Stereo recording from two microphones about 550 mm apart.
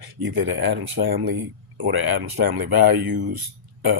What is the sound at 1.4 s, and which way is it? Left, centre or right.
Speech, centre.